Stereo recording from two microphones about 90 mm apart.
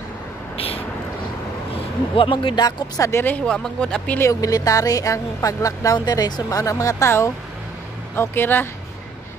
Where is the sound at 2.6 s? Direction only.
50° left (ahead or behind).